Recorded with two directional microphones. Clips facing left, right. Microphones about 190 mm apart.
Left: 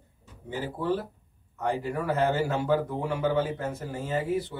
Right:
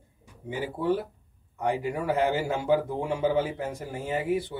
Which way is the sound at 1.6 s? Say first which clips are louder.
Right 1 dB; 15° right (ahead or behind).